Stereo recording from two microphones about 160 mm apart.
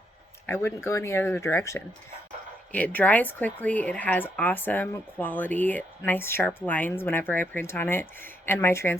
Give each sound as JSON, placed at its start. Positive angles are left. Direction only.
{"t": 0.4, "sound": "speech", "side_deg": 15}